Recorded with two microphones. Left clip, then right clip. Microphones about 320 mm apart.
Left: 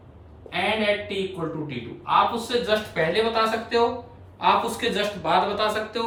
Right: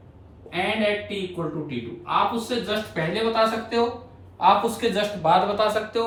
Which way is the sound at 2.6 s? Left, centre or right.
Centre.